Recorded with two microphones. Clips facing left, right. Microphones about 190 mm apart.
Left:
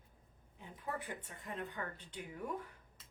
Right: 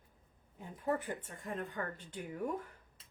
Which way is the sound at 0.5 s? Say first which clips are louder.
Right 8 dB; 45° right (ahead or behind).